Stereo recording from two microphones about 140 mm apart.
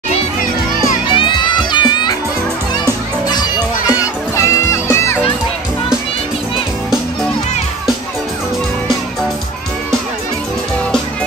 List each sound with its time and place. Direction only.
1.1 s music: 35° left (ahead or behind)
3.3 s children playing: 30° left (ahead or behind)
4.4 s music: 20° left (ahead or behind)